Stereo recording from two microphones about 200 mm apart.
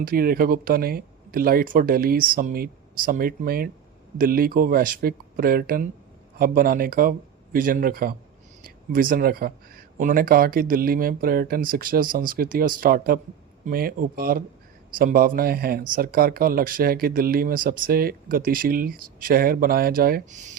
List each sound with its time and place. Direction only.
0.0 s speech: 45° right (ahead or behind)